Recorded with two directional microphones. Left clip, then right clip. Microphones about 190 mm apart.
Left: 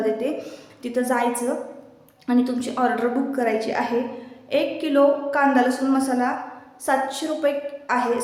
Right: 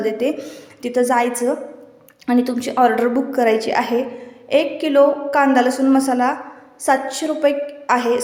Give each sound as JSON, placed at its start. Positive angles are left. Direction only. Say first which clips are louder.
{"t": 0.0, "sound": "a woman's voice", "louder": "right 4 dB", "side_deg": -30}